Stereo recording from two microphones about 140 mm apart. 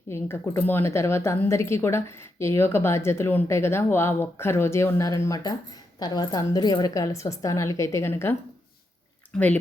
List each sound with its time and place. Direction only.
0.1 s speech: 15° left (ahead or behind)
9.3 s speech: 5° left (ahead or behind)